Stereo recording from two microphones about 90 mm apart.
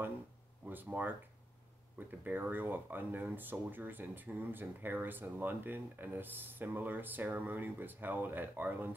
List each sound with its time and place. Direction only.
0.7 s speech: 20° right (ahead or behind)